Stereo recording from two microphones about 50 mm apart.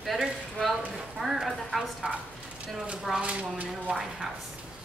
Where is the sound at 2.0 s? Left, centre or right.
Right.